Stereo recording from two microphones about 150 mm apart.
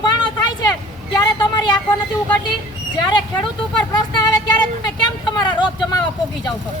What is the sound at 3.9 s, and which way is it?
Speech, 25° left (ahead or behind).